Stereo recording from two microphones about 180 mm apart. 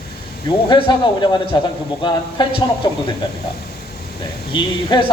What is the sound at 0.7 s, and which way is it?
A man's voice, 25° left (ahead or behind).